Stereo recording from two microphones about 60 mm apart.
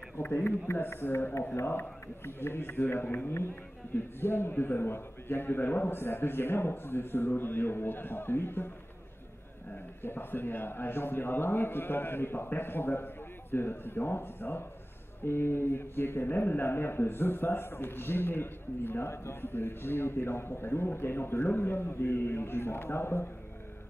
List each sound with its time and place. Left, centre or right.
0.2 s a man's voice: left
10.0 s a man's voice: left